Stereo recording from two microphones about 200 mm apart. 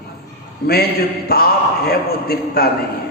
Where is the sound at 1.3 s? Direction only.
50° left (ahead or behind).